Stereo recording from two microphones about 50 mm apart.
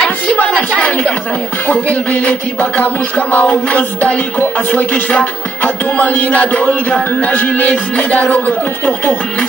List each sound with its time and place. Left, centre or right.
0.4 s music: left